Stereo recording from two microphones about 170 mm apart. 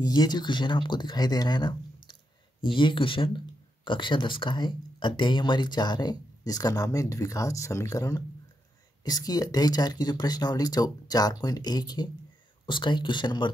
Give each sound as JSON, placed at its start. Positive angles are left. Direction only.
{"t": 0.0, "sound": "speech", "side_deg": 25}